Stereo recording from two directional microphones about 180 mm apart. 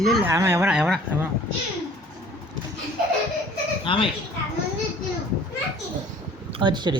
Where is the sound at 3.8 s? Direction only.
30° left (ahead or behind).